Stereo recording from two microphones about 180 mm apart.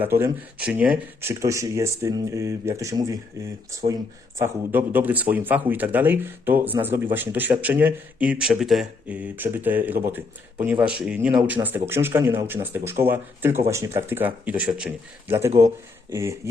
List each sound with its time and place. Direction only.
0.0 s speech: 10° right (ahead or behind)